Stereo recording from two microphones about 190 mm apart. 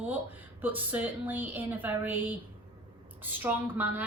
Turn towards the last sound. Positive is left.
turn(degrees=-10)  # may be behind; listen again after turning